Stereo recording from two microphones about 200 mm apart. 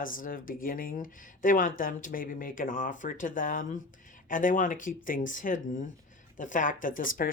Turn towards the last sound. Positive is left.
turn(degrees=45)  # may be behind; listen again after turning